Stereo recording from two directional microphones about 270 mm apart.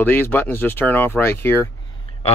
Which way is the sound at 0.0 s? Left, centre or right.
Centre.